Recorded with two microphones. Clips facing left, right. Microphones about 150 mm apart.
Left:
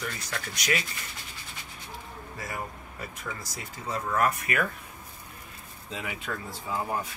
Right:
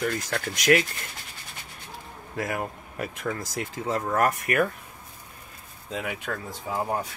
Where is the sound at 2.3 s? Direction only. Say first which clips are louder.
Right 8 dB; 65° right (ahead or behind).